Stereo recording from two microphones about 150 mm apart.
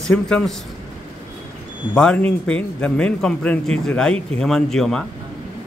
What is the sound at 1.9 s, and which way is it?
A man's voice, 5° left (ahead or behind).